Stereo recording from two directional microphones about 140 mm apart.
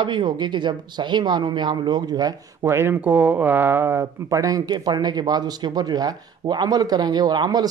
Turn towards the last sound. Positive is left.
turn(degrees=-30)  # may be behind; listen again after turning